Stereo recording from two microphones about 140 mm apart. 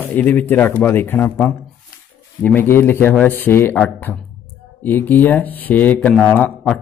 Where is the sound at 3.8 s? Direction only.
5° left (ahead or behind).